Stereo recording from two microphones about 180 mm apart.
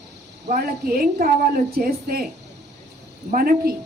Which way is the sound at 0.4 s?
55° right (ahead or behind).